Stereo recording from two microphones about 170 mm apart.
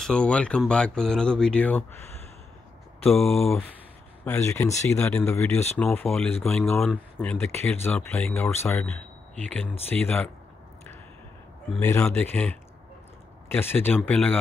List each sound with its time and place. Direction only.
0.0 s speech: 5° left (ahead or behind)
3.1 s speech: centre (ahead or behind)
4.2 s speech: 15° left (ahead or behind)
11.8 s speech: 15° left (ahead or behind)